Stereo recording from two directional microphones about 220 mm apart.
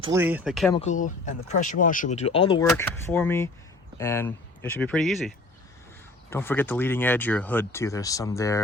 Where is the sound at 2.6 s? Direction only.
10° left (ahead or behind).